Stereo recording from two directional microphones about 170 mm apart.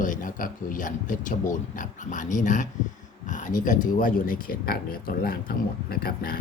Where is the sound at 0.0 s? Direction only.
50° left (ahead or behind).